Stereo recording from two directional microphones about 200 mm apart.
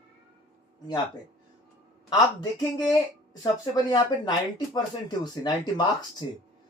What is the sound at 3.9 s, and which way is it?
Speech, 20° left (ahead or behind).